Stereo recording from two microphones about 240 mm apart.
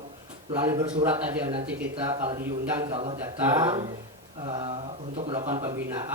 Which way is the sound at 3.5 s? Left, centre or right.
Centre.